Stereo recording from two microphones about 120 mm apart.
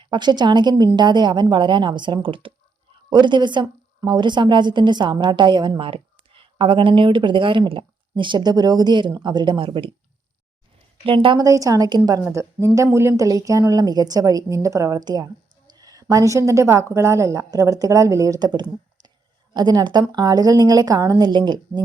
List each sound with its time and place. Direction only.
0.0 s a woman's voice: 40° right (ahead or behind)
11.0 s a woman's voice: 45° right (ahead or behind)
11.4 s a woman's voice: 30° right (ahead or behind)